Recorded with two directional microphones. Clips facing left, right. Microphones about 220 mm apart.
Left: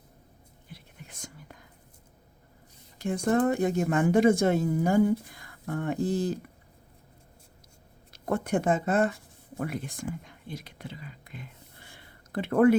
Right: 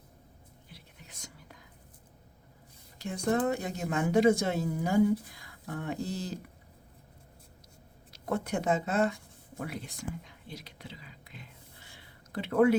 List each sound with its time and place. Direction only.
0.7 s whispering: 50° left (ahead or behind)
3.0 s speech: 50° left (ahead or behind)
8.1 s speech: 50° left (ahead or behind)